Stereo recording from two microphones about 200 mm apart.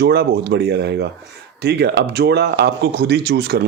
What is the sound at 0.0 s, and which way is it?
Speech, 55° right (ahead or behind).